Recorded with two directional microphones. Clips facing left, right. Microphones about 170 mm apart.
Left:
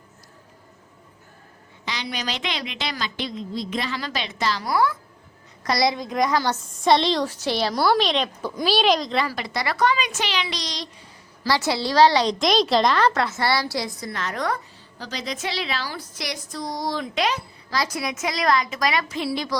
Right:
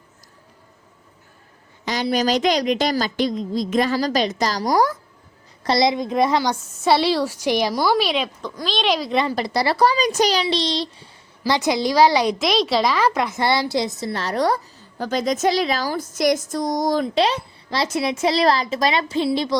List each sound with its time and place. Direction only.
1.8 s a woman's voice: 45° right (ahead or behind)
5.6 s speech: 25° right (ahead or behind)
6.4 s a woman's voice: 10° right (ahead or behind)
8.6 s speech: 5° left (ahead or behind)
9.3 s speech: 35° right (ahead or behind)
14.9 s a woman's voice: 50° right (ahead or behind)
17.2 s speech: 30° right (ahead or behind)